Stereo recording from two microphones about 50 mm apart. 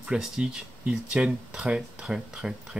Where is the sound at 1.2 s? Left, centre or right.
Right.